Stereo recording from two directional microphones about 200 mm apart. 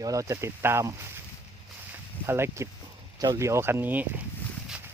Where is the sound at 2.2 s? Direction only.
10° right (ahead or behind).